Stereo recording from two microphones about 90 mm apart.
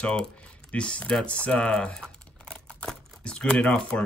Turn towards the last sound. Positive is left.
turn(degrees=10)  # may be behind; listen again after turning